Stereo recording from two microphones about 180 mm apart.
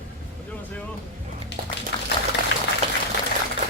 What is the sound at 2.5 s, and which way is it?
Boiling, 90° left.